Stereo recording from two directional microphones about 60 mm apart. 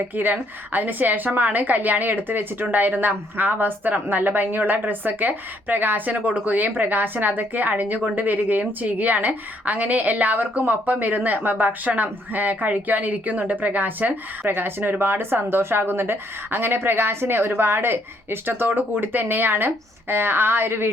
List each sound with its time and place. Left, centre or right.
0.2 s a woman's voice: right